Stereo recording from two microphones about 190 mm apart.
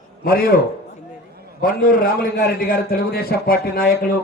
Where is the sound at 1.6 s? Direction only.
50° left (ahead or behind).